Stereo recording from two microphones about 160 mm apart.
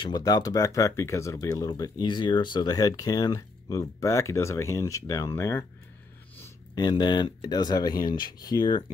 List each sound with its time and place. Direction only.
0.0 s speech: 25° left (ahead or behind)
6.7 s speech: 25° left (ahead or behind)